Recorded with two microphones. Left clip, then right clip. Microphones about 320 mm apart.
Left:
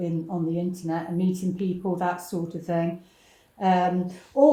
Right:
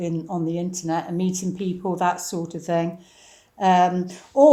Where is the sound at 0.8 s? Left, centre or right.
Right.